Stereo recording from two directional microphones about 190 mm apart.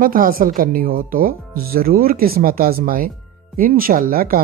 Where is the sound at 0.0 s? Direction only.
50° right (ahead or behind).